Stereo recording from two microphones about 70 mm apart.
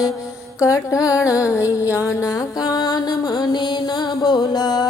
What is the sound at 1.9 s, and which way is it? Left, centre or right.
Music, left.